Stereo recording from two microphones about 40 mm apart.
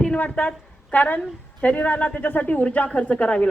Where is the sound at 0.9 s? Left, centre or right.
Left.